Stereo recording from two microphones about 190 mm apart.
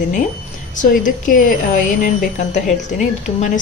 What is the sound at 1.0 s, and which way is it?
Speech, 45° left (ahead or behind).